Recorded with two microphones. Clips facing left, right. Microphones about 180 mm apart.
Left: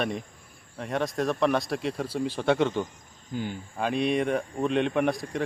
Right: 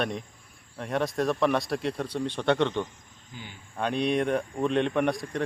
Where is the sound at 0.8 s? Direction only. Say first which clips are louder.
Right 1 dB; centre (ahead or behind).